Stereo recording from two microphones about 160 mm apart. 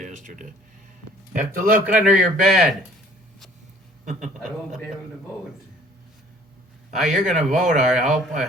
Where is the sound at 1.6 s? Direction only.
10° right (ahead or behind).